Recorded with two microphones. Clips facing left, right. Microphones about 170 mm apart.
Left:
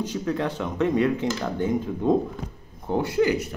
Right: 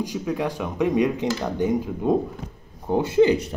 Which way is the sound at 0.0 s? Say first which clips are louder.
Right 1 dB; 10° right (ahead or behind).